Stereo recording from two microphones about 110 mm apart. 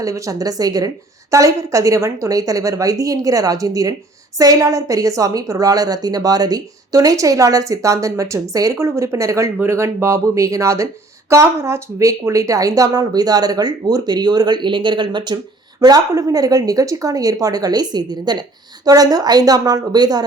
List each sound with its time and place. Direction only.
0.0 s a woman's voice: 30° right (ahead or behind)